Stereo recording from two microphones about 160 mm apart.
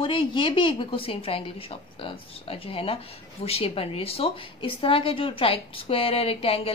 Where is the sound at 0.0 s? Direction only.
35° left (ahead or behind).